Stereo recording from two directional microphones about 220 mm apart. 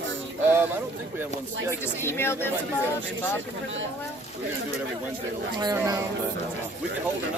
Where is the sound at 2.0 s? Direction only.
10° left (ahead or behind).